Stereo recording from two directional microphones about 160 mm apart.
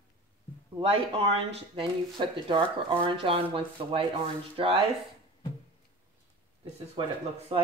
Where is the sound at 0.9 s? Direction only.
35° right (ahead or behind).